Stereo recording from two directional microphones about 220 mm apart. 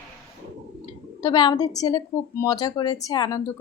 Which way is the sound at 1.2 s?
20° left (ahead or behind).